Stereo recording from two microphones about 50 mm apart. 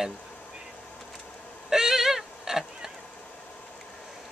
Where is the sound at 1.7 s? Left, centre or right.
Centre.